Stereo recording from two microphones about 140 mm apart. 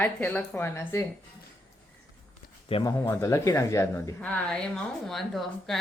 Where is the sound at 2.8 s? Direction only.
20° left (ahead or behind).